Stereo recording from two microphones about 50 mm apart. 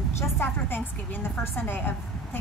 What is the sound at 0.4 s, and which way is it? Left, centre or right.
Speech, left.